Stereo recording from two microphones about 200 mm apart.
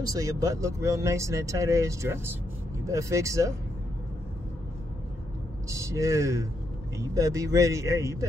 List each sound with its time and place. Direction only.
0.0 s speech: 20° right (ahead or behind)
5.7 s speech: 15° right (ahead or behind)